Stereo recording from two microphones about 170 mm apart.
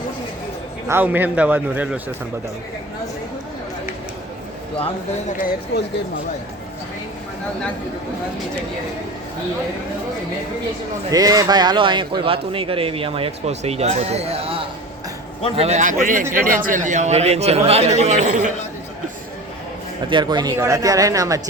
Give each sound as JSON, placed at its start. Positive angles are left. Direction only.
{"t": 0.9, "sound": "a man's voice", "side_deg": -10}
{"t": 5.4, "sound": "speech", "side_deg": 60}
{"t": 11.1, "sound": "a man's voice", "side_deg": -20}
{"t": 20.1, "sound": "speech", "side_deg": -25}